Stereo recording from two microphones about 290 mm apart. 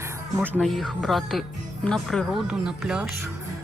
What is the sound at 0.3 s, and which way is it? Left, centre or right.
Speech, centre.